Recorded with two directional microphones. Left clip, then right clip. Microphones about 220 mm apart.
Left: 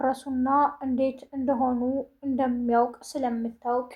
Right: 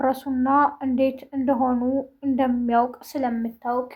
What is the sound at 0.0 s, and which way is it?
Speech, 30° right (ahead or behind).